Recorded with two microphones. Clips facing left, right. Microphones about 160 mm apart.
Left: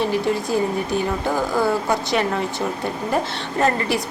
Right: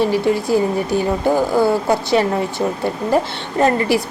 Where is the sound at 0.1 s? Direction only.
30° right (ahead or behind).